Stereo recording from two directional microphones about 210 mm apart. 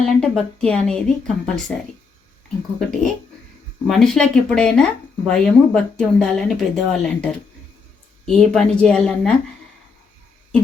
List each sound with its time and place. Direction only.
0.0 s speech: 5° left (ahead or behind)
2.7 s speech: centre (ahead or behind)